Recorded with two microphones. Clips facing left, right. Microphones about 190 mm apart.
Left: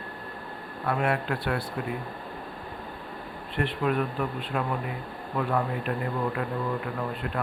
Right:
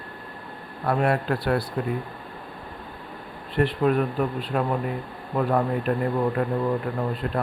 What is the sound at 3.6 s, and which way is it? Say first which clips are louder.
Speech: right 5 dB; 40° right (ahead or behind).